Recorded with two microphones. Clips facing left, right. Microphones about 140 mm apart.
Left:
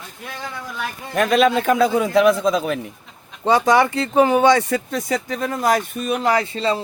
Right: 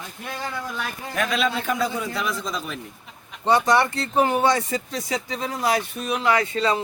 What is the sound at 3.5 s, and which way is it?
Speech, 90° left.